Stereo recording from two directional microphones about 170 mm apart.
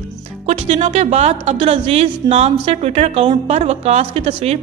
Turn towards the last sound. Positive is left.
turn(degrees=-35)  # may be behind; listen again after turning